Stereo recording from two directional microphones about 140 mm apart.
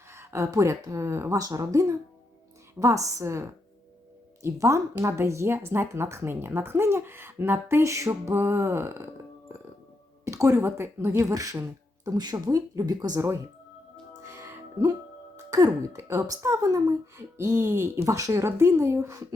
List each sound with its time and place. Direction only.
0.1 s speech: 20° right (ahead or behind)
10.2 s speech: 20° right (ahead or behind)
14.2 s music: 20° right (ahead or behind)
15.4 s speech: 25° right (ahead or behind)